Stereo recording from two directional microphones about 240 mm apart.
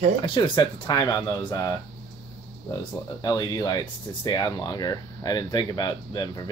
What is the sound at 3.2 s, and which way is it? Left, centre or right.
Speech, centre.